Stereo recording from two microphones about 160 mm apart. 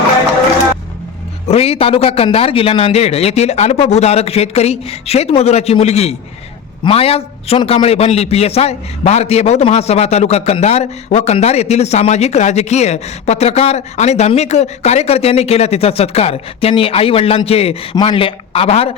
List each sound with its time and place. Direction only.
1.5 s a man's voice: 40° left (ahead or behind)